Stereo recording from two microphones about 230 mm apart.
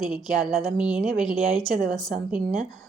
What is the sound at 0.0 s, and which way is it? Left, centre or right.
A woman's voice, centre.